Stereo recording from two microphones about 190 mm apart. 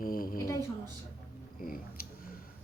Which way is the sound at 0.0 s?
50° left (ahead or behind).